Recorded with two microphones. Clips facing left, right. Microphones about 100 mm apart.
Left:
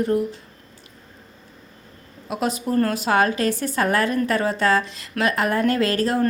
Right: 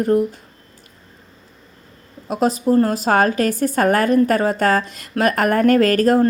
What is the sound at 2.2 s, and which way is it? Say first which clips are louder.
Speech: right 6 dB; 40° right (ahead or behind).